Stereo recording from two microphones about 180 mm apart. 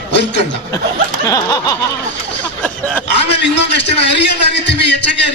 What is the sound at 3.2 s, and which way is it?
A man's voice, 75° left (ahead or behind).